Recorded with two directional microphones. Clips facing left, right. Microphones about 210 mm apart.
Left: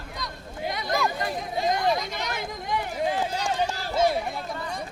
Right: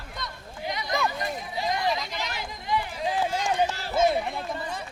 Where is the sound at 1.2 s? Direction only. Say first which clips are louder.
Left 3 dB; 50° left (ahead or behind).